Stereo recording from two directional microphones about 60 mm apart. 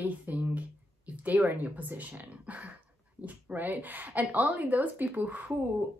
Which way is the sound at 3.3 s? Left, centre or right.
Right.